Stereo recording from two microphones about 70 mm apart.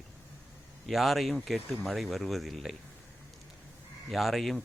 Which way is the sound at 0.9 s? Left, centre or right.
Centre.